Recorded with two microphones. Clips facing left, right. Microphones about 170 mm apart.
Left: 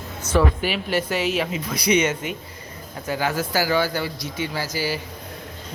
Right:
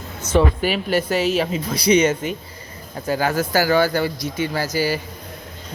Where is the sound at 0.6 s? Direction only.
45° right (ahead or behind).